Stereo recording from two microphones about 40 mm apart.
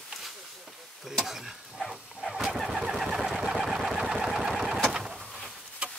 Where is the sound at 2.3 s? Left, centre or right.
Centre.